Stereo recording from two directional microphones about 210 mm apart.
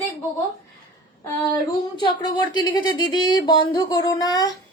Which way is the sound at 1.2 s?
20° left (ahead or behind).